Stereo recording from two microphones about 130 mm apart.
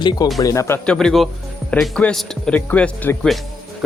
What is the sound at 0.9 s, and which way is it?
Speech, 5° left (ahead or behind).